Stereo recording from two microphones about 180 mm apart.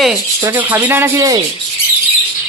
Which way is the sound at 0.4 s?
10° right (ahead or behind).